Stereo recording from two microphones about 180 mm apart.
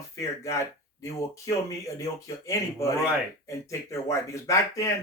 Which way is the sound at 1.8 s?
15° left (ahead or behind).